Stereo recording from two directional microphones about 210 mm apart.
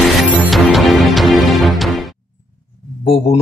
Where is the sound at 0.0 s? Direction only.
Centre (ahead or behind).